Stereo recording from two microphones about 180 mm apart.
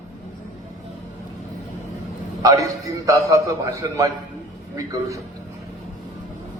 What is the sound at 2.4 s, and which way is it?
A man's voice, 20° right (ahead or behind).